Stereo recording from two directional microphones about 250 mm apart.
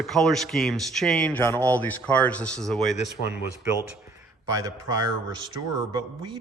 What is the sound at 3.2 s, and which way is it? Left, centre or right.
Speech, left.